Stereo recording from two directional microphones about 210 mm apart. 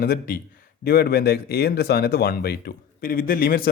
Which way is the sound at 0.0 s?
45° left (ahead or behind).